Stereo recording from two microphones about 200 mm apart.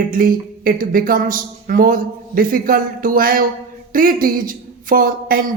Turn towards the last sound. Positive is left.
turn(degrees=-45)  # may be behind; listen again after turning